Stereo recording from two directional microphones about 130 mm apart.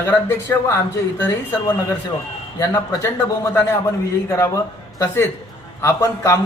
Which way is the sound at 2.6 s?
20° left (ahead or behind).